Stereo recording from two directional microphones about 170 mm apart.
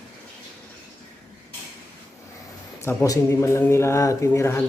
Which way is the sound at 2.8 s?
15° left (ahead or behind).